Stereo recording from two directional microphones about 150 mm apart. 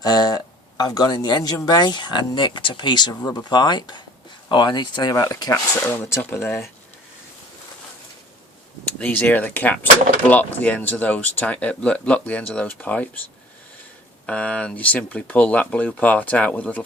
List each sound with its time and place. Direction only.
0.0 s speech: 25° left (ahead or behind)
5.9 s speech: 15° left (ahead or behind)
9.0 s speech: 10° left (ahead or behind)
14.3 s speech: 10° left (ahead or behind)